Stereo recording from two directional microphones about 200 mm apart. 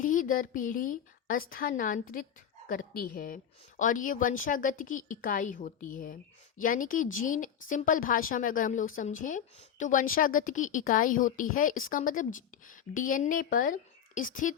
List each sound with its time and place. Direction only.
0.0 s a woman's voice: 40° left (ahead or behind)